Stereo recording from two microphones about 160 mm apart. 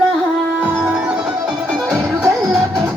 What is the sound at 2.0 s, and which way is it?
Music, 10° right (ahead or behind).